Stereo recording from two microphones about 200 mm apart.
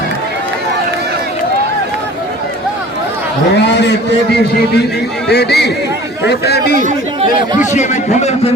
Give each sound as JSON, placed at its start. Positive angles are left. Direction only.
{"t": 3.5, "sound": "speech", "side_deg": 60}
{"t": 5.3, "sound": "speech", "side_deg": 55}
{"t": 6.7, "sound": "speech", "side_deg": -40}
{"t": 7.6, "sound": "a man's voice", "side_deg": 35}